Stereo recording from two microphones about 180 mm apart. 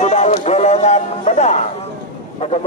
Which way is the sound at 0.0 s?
40° left (ahead or behind).